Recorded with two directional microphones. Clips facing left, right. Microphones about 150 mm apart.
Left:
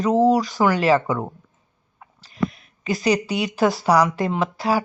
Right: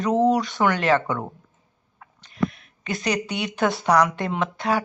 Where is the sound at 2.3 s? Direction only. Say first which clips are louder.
Left 1 dB; centre (ahead or behind).